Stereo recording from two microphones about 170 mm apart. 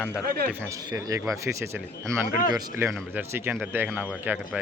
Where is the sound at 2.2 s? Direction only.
55° left (ahead or behind).